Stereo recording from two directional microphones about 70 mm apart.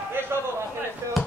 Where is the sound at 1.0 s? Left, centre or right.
Right.